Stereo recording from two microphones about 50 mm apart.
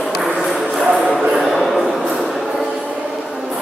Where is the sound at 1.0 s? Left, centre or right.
Centre.